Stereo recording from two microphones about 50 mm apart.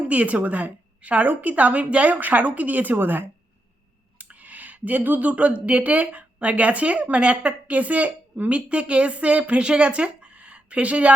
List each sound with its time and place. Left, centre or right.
0.1 s a woman's voice: right
4.2 s speech: right